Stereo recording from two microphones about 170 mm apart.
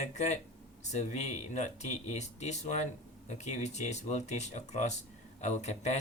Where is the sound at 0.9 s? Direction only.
45° left (ahead or behind).